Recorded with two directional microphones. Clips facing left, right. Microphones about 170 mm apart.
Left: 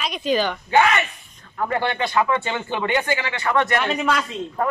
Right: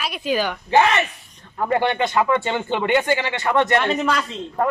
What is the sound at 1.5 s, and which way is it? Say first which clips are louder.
Speech: right 3 dB; 20° right (ahead or behind).